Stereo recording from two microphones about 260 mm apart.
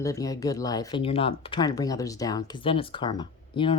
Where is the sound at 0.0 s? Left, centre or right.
Centre.